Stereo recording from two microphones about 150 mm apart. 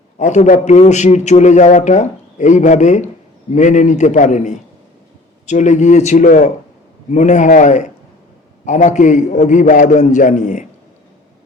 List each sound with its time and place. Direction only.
0.2 s a man's voice: 55° left (ahead or behind)